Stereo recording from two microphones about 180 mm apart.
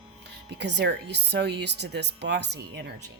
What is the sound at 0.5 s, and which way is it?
Speech, 70° right (ahead or behind).